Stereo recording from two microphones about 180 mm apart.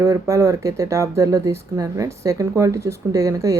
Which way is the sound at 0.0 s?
15° right (ahead or behind).